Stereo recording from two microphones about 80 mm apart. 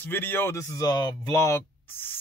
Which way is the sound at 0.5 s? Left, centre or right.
Left.